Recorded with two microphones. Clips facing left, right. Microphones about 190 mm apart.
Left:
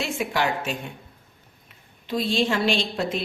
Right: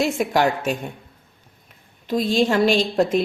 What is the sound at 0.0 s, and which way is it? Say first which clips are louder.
Speech: right 6 dB; 45° right (ahead or behind).